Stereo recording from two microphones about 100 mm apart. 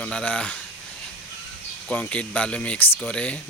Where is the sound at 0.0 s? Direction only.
10° left (ahead or behind).